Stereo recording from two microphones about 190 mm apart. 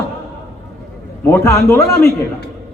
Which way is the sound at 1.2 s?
15° left (ahead or behind).